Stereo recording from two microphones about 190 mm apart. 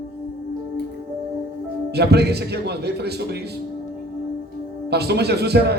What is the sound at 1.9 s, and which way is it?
A man's voice, 60° right (ahead or behind).